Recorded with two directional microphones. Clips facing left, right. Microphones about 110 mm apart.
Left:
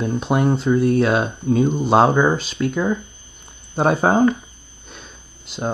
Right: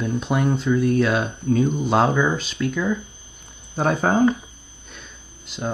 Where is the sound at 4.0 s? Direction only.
40° left (ahead or behind).